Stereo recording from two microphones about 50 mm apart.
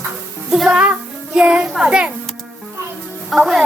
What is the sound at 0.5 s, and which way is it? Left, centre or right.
A child's voice, centre.